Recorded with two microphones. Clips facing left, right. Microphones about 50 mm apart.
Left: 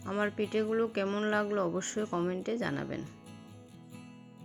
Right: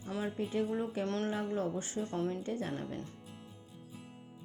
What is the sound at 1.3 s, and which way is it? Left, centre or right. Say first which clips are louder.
Speech: left 5 dB; left.